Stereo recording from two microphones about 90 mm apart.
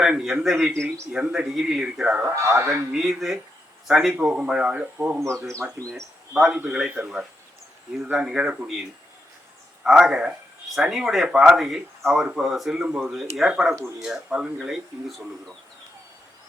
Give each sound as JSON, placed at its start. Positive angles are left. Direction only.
{"t": 0.0, "sound": "speech", "side_deg": -5}
{"t": 0.7, "sound": "speech", "side_deg": -30}
{"t": 1.1, "sound": "speech", "side_deg": -10}
{"t": 2.2, "sound": "speech", "side_deg": -35}
{"t": 2.9, "sound": "speech", "side_deg": -5}
{"t": 5.2, "sound": "speech", "side_deg": -35}
{"t": 6.3, "sound": "speech", "side_deg": -10}
{"t": 9.8, "sound": "speech", "side_deg": -5}